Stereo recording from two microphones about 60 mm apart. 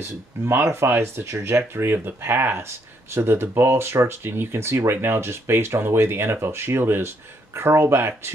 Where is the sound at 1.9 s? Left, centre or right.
Right.